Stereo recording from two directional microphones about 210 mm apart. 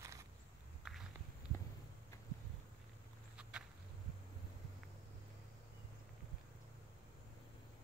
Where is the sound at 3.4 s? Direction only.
5° right (ahead or behind).